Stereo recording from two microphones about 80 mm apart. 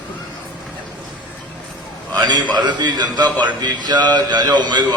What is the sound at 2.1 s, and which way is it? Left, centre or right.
A man's voice, right.